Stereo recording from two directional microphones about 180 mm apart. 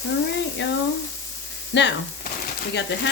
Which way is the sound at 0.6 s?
75° left (ahead or behind).